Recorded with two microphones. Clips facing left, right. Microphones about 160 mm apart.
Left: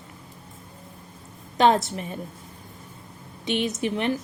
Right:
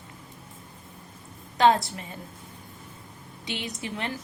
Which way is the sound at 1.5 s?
20° left (ahead or behind).